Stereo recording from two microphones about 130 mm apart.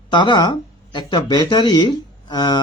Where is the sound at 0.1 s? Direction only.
35° left (ahead or behind).